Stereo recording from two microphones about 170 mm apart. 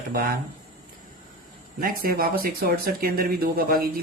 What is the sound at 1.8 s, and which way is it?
Speech, 60° right (ahead or behind).